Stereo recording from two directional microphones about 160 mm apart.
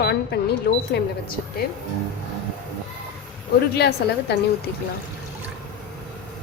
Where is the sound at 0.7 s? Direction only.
70° left (ahead or behind).